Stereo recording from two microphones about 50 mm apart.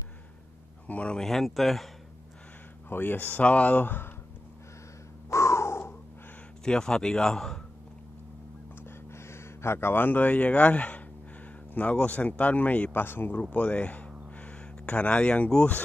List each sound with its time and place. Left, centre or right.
0.8 s speech: left
1.1 s speech: centre
2.9 s speech: left
3.7 s speech: left
5.3 s crow: left
6.6 s speech: centre
8.8 s a sound: left
11.7 s speech: left
13.4 s speech: left